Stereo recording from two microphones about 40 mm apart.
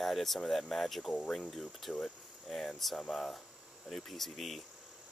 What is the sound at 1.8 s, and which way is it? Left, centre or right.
Speech, centre.